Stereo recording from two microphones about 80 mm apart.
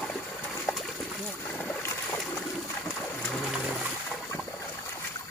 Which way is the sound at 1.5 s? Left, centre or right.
Left.